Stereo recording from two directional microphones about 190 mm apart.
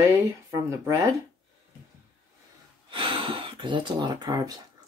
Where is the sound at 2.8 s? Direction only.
25° right (ahead or behind).